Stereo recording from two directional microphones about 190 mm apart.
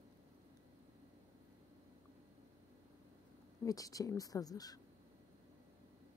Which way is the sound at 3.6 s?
20° left (ahead or behind).